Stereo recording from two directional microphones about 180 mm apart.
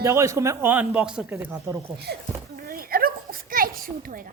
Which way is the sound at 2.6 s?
55° right (ahead or behind).